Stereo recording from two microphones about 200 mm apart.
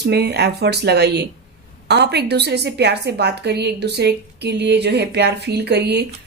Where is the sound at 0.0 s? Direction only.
55° right (ahead or behind).